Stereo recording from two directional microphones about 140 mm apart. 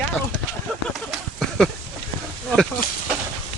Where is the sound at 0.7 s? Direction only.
5° left (ahead or behind).